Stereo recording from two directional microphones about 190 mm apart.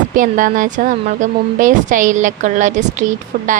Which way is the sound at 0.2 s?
45° right (ahead or behind).